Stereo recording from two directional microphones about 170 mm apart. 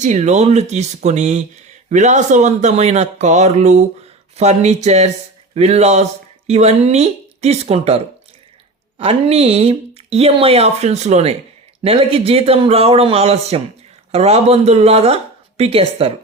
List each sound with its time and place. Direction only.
0.0 s speech: 45° right (ahead or behind)